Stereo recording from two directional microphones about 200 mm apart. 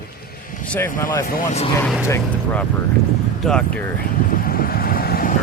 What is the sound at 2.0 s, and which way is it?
Speech, 10° left (ahead or behind).